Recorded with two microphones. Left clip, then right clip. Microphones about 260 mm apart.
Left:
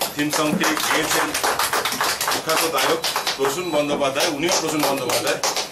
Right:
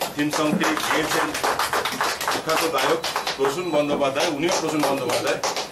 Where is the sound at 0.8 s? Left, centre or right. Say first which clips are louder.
Left 2 dB; centre.